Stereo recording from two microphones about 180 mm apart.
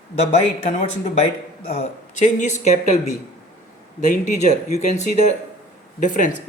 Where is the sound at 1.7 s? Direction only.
40° left (ahead or behind).